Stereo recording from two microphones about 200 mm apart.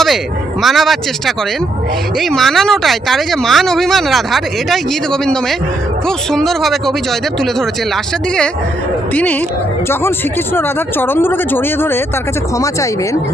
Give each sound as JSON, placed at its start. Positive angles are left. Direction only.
{"t": 0.6, "sound": "speech", "side_deg": 0}
{"t": 2.1, "sound": "speech", "side_deg": 0}
{"t": 9.1, "sound": "speech", "side_deg": 10}
{"t": 10.5, "sound": "speech", "side_deg": 10}